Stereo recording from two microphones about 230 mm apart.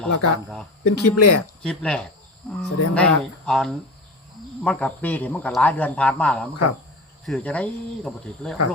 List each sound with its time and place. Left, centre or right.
0.1 s speech: left
1.6 s speech: centre